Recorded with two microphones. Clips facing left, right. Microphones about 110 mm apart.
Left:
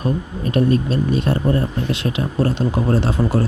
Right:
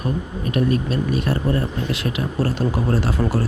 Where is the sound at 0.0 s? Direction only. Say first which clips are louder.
Left 3 dB; 30° left (ahead or behind).